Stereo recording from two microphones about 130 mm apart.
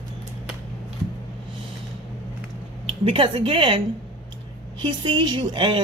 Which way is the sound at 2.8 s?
45° right (ahead or behind).